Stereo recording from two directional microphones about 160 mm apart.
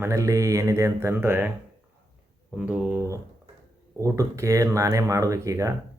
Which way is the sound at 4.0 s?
20° right (ahead or behind).